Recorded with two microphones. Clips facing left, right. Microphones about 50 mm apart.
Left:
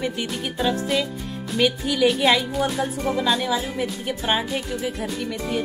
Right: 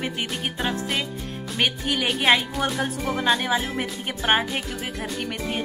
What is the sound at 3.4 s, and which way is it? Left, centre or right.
Music, right.